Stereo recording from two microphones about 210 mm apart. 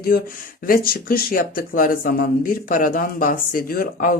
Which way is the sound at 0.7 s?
45° left (ahead or behind).